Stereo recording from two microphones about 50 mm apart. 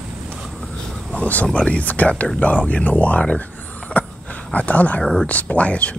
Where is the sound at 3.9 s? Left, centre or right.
Left.